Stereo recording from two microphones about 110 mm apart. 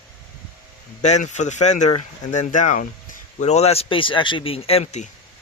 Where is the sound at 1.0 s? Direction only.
90° left.